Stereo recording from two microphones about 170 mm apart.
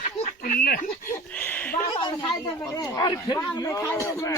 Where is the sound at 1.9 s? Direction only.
30° left (ahead or behind).